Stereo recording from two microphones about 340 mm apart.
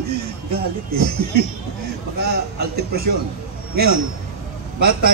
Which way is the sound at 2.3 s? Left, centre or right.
Right.